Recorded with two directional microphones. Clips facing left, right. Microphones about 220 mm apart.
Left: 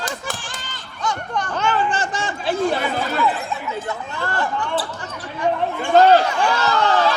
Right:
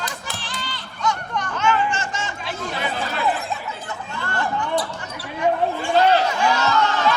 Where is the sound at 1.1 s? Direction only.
35° left (ahead or behind).